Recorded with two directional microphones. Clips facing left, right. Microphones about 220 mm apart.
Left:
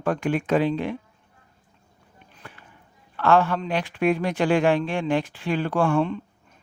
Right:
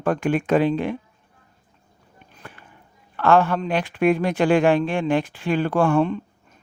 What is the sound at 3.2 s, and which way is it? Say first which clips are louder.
Speech: right 2 dB; 55° right (ahead or behind).